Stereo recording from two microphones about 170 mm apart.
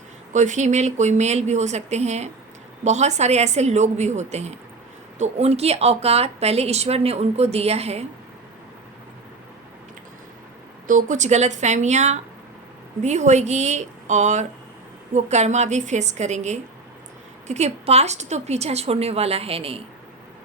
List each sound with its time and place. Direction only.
0.3 s a woman's voice: 45° right (ahead or behind)
10.8 s a woman's voice: 50° right (ahead or behind)